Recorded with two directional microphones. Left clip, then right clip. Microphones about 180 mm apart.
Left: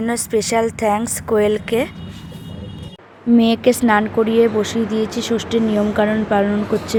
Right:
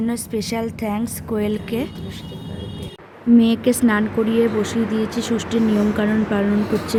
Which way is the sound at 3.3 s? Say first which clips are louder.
Left 3 dB; 30° left (ahead or behind).